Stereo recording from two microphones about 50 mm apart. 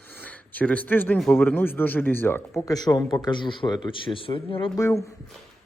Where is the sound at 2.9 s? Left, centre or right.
Left.